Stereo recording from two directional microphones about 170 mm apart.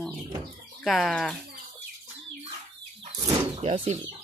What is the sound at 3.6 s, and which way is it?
Speech, 40° right (ahead or behind).